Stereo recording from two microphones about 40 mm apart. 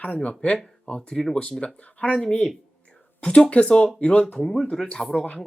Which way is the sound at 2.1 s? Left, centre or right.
Left.